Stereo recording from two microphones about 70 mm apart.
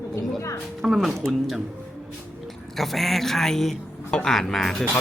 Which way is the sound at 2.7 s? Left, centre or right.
Centre.